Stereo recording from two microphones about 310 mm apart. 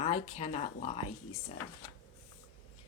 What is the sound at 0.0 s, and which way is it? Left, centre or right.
Speech, centre.